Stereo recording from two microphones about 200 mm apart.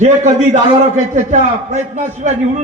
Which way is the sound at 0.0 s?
35° right (ahead or behind).